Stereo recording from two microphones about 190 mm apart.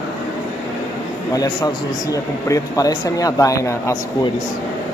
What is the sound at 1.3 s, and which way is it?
A man's voice, 20° left (ahead or behind).